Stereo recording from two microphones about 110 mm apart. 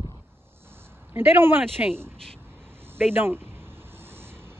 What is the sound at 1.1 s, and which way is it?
Speech, 20° right (ahead or behind).